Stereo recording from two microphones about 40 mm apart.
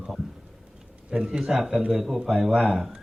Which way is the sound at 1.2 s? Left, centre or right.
Centre.